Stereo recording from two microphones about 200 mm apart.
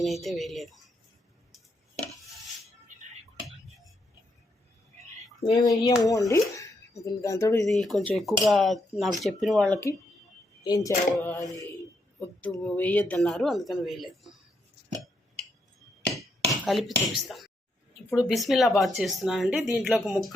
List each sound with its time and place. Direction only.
0.0 s speech: centre (ahead or behind)
5.4 s speech: 20° left (ahead or behind)
7.7 s speech: centre (ahead or behind)
10.6 s speech: 20° left (ahead or behind)
12.6 s speech: 5° left (ahead or behind)
16.6 s speech: centre (ahead or behind)